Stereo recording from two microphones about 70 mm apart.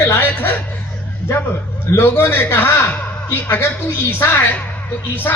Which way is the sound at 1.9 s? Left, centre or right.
Left.